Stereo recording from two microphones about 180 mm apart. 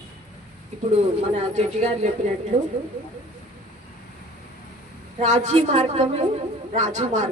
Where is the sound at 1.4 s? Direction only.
40° right (ahead or behind).